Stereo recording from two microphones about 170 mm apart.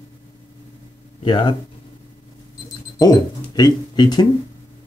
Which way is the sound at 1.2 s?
30° left (ahead or behind).